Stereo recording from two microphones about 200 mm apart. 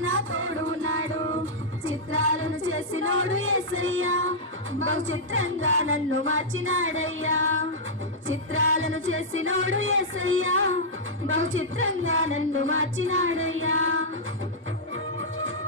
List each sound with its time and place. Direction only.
0.0 s music: 85° right
15.1 s music: 80° right